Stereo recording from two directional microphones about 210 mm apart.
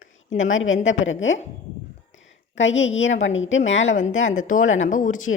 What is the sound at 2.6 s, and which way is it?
A woman's voice, 65° left (ahead or behind).